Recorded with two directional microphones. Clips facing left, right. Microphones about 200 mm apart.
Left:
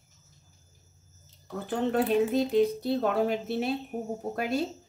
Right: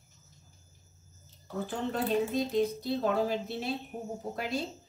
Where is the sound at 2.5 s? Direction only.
60° left (ahead or behind).